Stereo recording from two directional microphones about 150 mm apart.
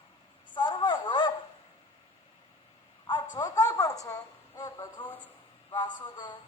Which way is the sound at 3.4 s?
25° left (ahead or behind).